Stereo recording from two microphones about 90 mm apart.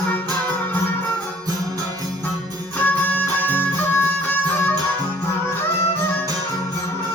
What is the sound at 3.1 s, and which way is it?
Music, 15° left (ahead or behind).